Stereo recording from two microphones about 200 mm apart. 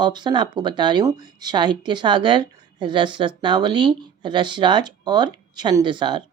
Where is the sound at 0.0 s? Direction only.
20° right (ahead or behind).